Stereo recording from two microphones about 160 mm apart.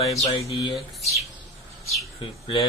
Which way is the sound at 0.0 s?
40° left (ahead or behind).